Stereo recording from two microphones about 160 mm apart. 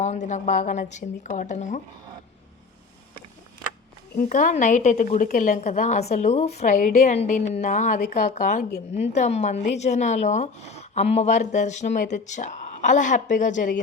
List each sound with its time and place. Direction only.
0.0 s speech: 45° left (ahead or behind)
4.2 s speech: 55° left (ahead or behind)